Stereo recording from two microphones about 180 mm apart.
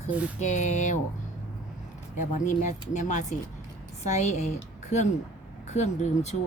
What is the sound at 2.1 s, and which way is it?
A woman's voice, 45° left (ahead or behind).